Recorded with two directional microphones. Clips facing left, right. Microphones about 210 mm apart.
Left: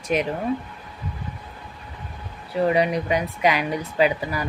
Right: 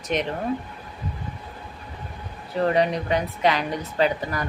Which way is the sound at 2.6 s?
10° left (ahead or behind).